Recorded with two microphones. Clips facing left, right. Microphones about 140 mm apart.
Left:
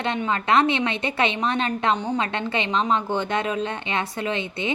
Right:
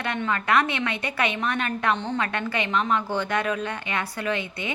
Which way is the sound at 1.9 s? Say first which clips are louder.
Left 3 dB; 10° left (ahead or behind).